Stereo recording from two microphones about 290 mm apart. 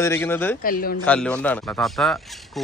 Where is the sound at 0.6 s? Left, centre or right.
Left.